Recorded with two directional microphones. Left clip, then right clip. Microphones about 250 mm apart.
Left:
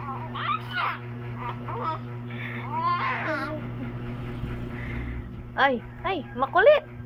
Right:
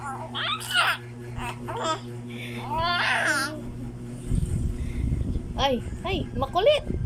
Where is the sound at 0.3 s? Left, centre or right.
Right.